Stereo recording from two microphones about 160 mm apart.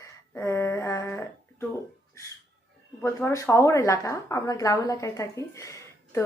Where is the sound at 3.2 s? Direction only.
15° left (ahead or behind).